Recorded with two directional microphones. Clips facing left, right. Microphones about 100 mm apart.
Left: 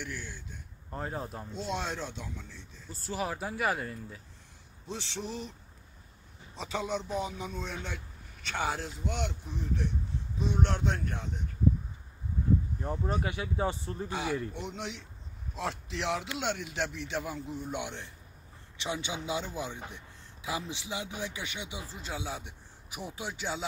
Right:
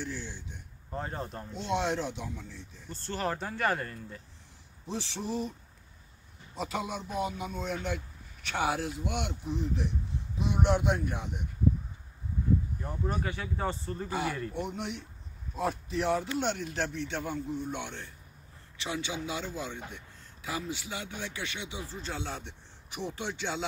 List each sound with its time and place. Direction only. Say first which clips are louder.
0.8 s speech: even; centre (ahead or behind)
1.8 s a man's voice: right 5 dB; 15° right (ahead or behind)
2.9 s speech: right 1 dB; 5° left (ahead or behind)
4.8 s a man's voice: right 3 dB; 15° right (ahead or behind)
6.5 s a man's voice: left 1 dB; 5° right (ahead or behind)
12.8 s speech: left 1 dB; 30° left (ahead or behind)
13.3 s a man's voice: left 1 dB; 15° left (ahead or behind)
14.0 s a man's voice: even; 5° right (ahead or behind)
16.2 s a man's voice: right 3 dB; 5° left (ahead or behind)